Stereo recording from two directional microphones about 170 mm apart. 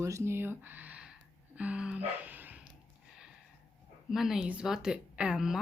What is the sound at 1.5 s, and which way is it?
Music, 5° right (ahead or behind).